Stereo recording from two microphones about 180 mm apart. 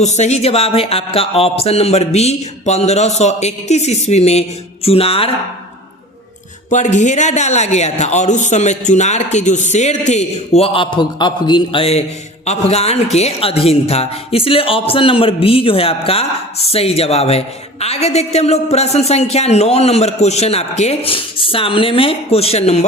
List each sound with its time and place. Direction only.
0.0 s a woman's voice: 40° left (ahead or behind)
6.7 s a woman's voice: 40° left (ahead or behind)